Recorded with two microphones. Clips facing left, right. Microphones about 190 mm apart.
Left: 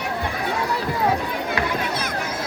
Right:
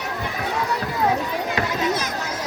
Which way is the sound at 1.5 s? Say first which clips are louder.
Right 1 dB; 55° left (ahead or behind).